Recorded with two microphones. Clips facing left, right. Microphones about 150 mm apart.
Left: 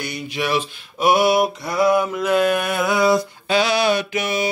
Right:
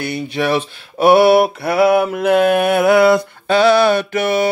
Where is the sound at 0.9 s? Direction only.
65° right (ahead or behind).